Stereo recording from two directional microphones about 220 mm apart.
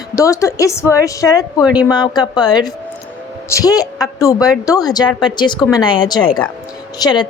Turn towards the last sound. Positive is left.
turn(degrees=20)  # may be behind; listen again after turning